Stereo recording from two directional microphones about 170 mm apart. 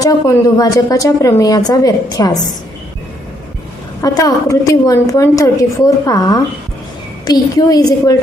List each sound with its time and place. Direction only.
0.0 s a woman's voice: 20° left (ahead or behind)
4.0 s a woman's voice: 20° left (ahead or behind)